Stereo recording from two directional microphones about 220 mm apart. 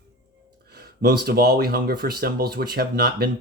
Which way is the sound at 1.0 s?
45° right (ahead or behind).